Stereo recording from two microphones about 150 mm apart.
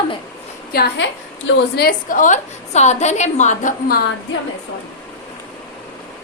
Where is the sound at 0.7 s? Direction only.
90° left; by 4.0 s 70° left (ahead or behind).